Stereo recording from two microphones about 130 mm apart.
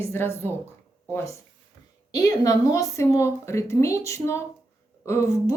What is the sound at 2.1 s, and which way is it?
Speech, 30° left (ahead or behind).